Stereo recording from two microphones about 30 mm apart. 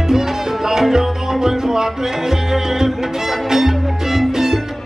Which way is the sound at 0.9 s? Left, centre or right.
Centre.